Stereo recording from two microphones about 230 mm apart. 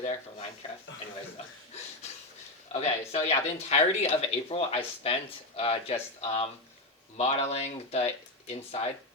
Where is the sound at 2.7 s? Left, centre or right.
Left.